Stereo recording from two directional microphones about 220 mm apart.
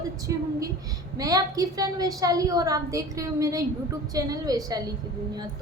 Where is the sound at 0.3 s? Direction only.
15° right (ahead or behind).